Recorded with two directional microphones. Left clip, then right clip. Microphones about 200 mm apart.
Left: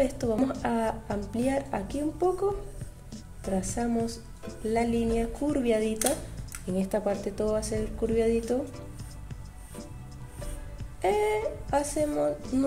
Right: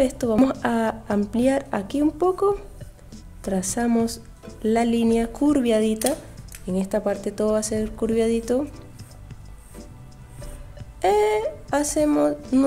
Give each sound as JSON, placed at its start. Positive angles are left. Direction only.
{"t": 0.0, "sound": "a woman's voice", "side_deg": -25}
{"t": 11.0, "sound": "a woman's voice", "side_deg": -20}